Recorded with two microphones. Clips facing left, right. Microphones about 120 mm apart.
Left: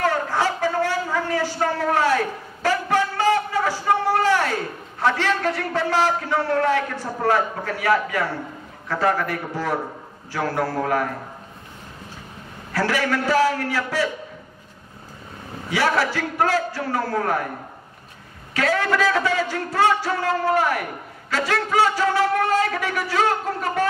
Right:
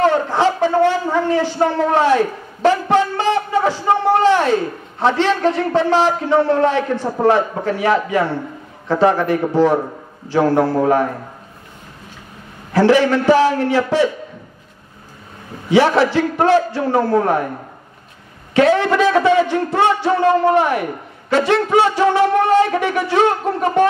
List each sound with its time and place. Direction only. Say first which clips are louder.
0.0 s a sound: right 7 dB; 25° right (ahead or behind)
5.0 s a man's voice: right 6 dB; 25° right (ahead or behind)
12.7 s a man's voice: right 9 dB; 20° right (ahead or behind)
15.7 s a man's voice: right 8 dB; 25° right (ahead or behind)
18.5 s a man's voice: right 8 dB; 25° right (ahead or behind)